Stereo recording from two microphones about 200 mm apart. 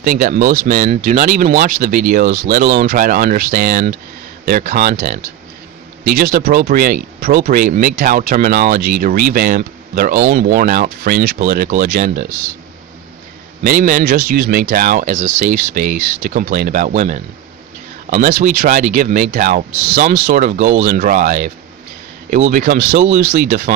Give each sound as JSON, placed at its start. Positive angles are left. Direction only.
{"t": 0.2, "sound": "speech", "side_deg": -45}
{"t": 13.7, "sound": "speech", "side_deg": -45}